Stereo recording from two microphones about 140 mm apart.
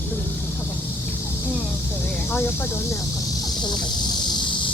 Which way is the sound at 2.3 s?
15° left (ahead or behind).